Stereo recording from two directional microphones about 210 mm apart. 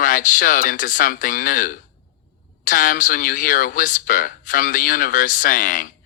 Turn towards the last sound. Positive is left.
turn(degrees=40)  # may be behind; listen again after turning